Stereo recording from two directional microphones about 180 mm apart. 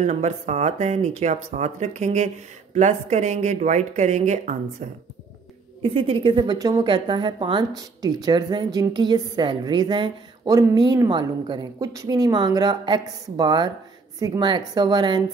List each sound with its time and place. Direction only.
0.0 s a woman's voice: 40° right (ahead or behind)